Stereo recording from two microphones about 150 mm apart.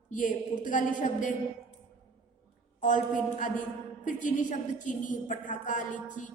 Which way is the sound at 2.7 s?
60° left (ahead or behind).